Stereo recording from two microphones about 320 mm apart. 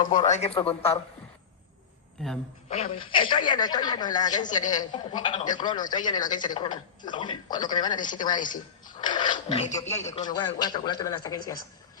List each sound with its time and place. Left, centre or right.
0.2 s speech: left
2.6 s speech: centre
9.9 s speech: centre